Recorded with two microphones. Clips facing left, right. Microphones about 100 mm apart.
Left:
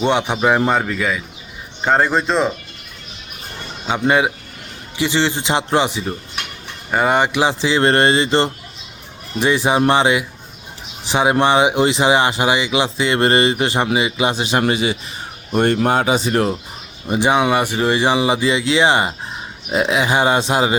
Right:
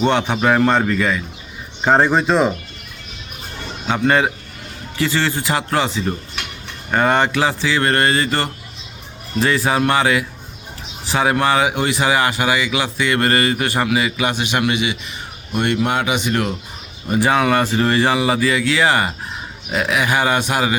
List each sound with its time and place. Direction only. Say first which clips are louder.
0.0 s a man's voice: even; 15° left (ahead or behind)
0.7 s a man's voice: right 1 dB; 5° left (ahead or behind)
3.8 s a man's voice: even; 15° left (ahead or behind); by 16.6 s 35° left (ahead or behind)
17.1 s speech: even; 20° left (ahead or behind)